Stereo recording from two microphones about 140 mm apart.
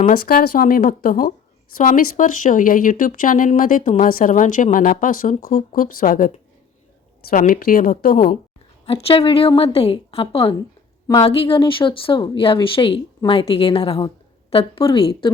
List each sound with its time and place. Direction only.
0.1 s speech: 90° left
2.1 s a woman's voice: 65° left (ahead or behind); by 8.2 s 90° left
8.9 s speech: 45° left (ahead or behind)